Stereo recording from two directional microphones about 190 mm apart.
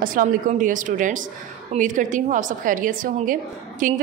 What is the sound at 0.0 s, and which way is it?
A woman's voice, 45° right (ahead or behind).